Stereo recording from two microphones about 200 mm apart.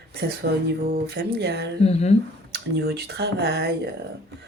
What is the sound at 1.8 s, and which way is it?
Speech, 30° left (ahead or behind).